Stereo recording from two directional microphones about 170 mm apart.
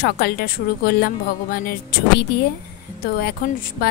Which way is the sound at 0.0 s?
65° left (ahead or behind).